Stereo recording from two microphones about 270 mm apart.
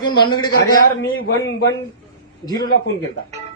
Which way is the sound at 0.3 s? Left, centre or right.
Centre.